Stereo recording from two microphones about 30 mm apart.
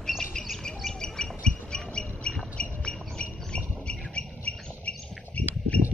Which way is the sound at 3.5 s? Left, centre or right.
Left.